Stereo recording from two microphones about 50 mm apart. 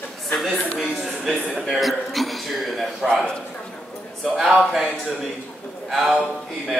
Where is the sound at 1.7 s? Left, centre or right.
Centre.